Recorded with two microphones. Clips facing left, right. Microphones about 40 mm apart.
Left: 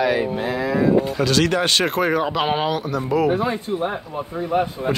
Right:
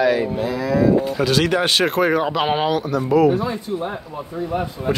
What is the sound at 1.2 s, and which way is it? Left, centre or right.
Speech, centre.